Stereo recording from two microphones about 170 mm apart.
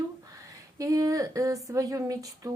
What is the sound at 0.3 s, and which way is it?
Speech, 20° right (ahead or behind).